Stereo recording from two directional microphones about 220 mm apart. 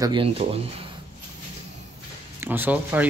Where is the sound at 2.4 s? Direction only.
10° right (ahead or behind).